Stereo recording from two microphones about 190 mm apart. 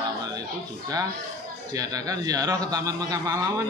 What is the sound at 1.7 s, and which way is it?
Speech, 20° right (ahead or behind).